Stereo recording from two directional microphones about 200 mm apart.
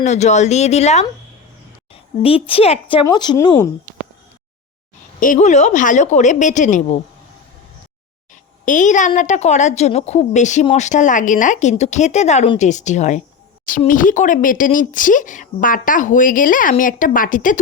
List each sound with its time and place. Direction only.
0.0 s a woman's voice: 35° left (ahead or behind); by 3.7 s 20° left (ahead or behind)
5.2 s a woman's voice: 40° left (ahead or behind)
8.6 s a woman's voice: 40° left (ahead or behind)